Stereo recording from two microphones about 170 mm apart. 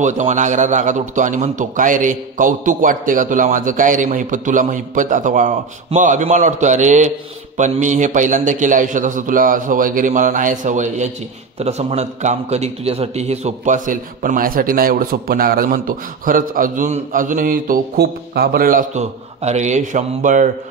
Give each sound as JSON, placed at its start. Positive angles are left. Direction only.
{"t": 0.0, "sound": "a man's voice", "side_deg": -45}
{"t": 18.9, "sound": "a man's voice", "side_deg": -40}